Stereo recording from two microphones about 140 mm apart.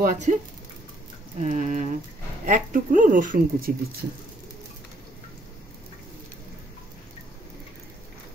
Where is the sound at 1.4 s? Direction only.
60° right (ahead or behind).